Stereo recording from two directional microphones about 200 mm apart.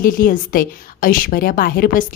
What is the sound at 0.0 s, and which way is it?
A woman's voice, 45° left (ahead or behind).